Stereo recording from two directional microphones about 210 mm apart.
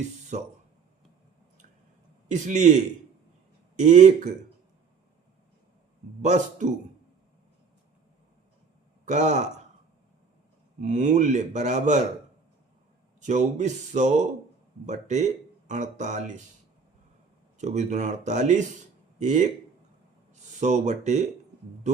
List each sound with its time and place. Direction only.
0.0 s speech: 35° right (ahead or behind)
2.3 s speech: 35° right (ahead or behind)
6.2 s speech: 35° right (ahead or behind)
9.0 s speech: 35° right (ahead or behind)
10.8 s speech: 35° right (ahead or behind)
13.1 s speech: 35° right (ahead or behind)
17.6 s speech: 35° right (ahead or behind)